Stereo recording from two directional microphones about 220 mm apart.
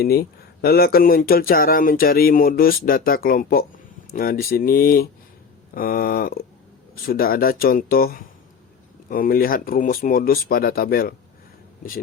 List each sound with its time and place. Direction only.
0.0 s speech: 45° left (ahead or behind)